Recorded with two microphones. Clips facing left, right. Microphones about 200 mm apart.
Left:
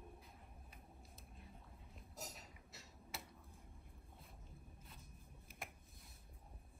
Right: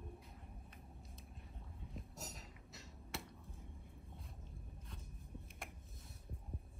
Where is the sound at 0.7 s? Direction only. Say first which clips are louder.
Right 3 dB; centre (ahead or behind).